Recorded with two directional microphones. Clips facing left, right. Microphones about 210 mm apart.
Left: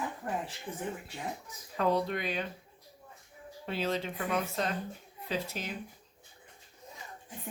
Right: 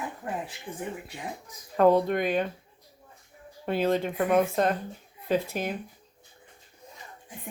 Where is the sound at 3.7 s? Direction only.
55° right (ahead or behind).